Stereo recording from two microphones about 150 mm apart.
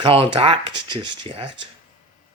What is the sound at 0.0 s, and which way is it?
Speech, 35° right (ahead or behind).